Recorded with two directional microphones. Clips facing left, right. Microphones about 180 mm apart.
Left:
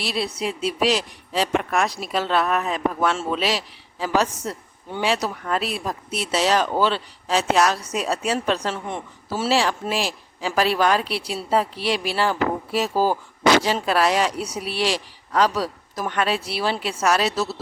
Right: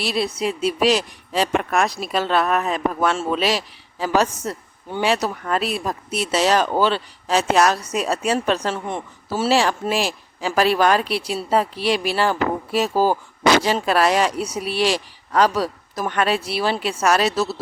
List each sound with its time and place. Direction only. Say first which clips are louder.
0.0 s speech: right 3 dB; 45° right (ahead or behind)